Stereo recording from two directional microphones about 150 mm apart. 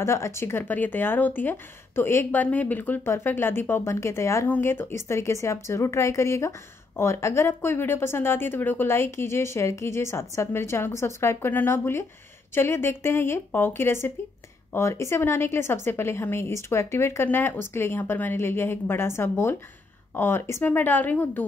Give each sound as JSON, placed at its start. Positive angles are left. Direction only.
{"t": 0.0, "sound": "speech", "side_deg": 20}